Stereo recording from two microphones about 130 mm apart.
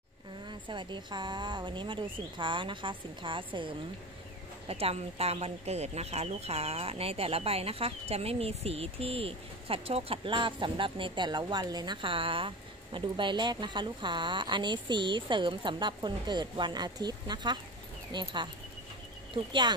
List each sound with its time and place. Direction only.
0.5 s speech: 35° right (ahead or behind)